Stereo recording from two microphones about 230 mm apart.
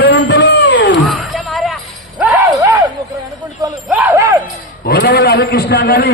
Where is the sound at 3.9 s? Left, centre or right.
Centre.